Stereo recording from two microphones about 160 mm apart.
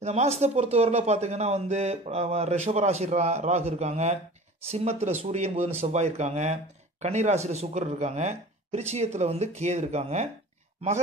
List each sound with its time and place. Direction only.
0.0 s speech: 45° right (ahead or behind)